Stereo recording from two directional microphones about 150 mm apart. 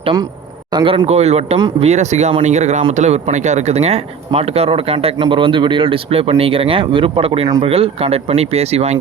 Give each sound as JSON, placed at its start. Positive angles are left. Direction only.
{"t": 0.0, "sound": "speech", "side_deg": -30}